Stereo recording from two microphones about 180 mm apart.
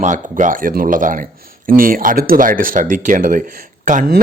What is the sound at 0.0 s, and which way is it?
A man's voice, 45° right (ahead or behind).